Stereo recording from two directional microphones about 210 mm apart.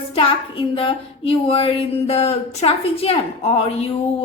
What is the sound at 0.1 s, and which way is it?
Speech, 25° left (ahead or behind).